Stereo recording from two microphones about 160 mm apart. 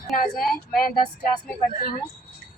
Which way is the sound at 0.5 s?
65° left (ahead or behind).